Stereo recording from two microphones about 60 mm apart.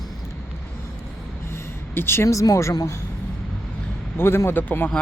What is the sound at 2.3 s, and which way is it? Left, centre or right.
Speech, left.